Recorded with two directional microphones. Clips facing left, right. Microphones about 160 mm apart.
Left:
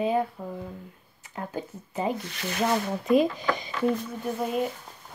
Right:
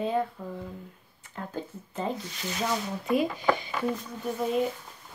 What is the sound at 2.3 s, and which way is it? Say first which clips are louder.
Speech: left 4 dB; 65° left (ahead or behind).